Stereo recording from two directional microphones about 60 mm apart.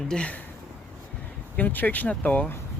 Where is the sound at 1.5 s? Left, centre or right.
Left.